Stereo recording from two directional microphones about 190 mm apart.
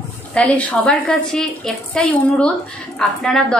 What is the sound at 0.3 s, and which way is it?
A woman's voice, 5° left (ahead or behind).